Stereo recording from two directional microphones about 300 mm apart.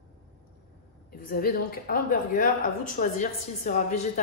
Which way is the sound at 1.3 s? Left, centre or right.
Left.